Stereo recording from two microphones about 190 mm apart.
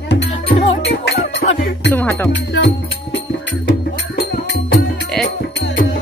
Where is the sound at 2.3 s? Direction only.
70° left (ahead or behind).